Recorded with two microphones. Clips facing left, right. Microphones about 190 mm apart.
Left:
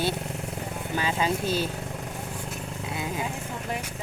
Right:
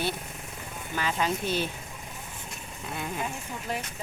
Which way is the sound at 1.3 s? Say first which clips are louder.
Left 2 dB; 35° left (ahead or behind).